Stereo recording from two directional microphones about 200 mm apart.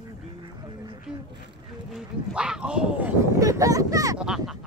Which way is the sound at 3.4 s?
15° right (ahead or behind).